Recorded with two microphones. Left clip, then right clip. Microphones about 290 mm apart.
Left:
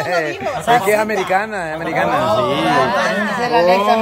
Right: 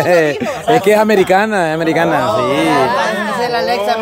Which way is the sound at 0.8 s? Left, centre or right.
Right.